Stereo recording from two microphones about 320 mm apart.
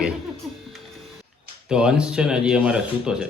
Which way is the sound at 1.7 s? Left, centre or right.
Centre.